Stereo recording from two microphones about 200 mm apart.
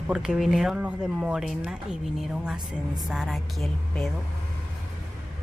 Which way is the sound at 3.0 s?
5° right (ahead or behind).